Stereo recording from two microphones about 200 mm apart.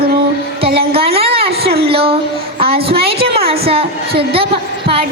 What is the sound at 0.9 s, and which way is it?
A woman's voice, 30° right (ahead or behind).